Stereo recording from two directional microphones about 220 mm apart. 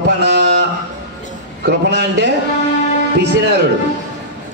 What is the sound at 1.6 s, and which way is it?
Speech, 50° right (ahead or behind).